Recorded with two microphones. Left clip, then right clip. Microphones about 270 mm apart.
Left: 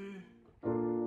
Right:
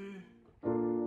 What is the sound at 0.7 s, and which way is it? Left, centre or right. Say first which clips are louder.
Music: right 1 dB; centre.